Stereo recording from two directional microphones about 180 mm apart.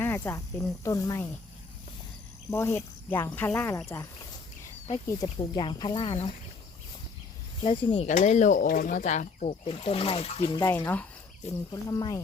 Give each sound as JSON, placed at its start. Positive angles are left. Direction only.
{"t": 0.0, "sound": "speech", "side_deg": 15}
{"t": 2.5, "sound": "speech", "side_deg": 15}
{"t": 7.6, "sound": "speech", "side_deg": 30}
{"t": 8.0, "sound": "speech", "side_deg": 40}
{"t": 10.6, "sound": "speech", "side_deg": 15}